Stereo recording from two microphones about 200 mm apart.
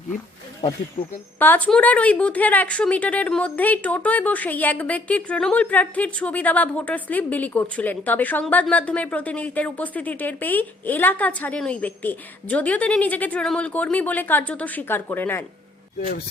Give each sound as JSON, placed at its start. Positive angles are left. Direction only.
{"t": 1.0, "sound": "speech", "side_deg": 25}
{"t": 1.4, "sound": "a woman's voice", "side_deg": 10}
{"t": 16.0, "sound": "speech", "side_deg": 50}